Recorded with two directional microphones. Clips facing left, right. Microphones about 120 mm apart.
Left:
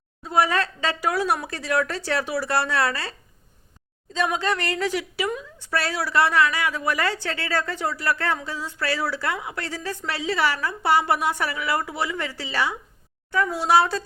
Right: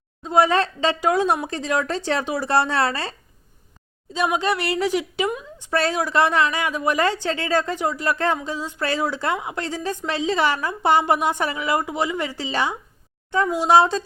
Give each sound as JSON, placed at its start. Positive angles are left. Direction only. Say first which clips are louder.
{"t": 0.2, "sound": "a woman's voice", "louder": "right 4 dB", "side_deg": -25}
{"t": 4.1, "sound": "a woman's voice", "louder": "right 2 dB", "side_deg": -15}